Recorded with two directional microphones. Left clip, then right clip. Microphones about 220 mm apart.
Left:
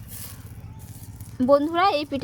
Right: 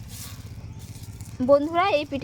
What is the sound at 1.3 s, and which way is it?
Speech, 40° left (ahead or behind).